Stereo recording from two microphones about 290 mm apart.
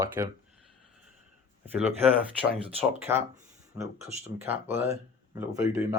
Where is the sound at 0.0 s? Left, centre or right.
Centre.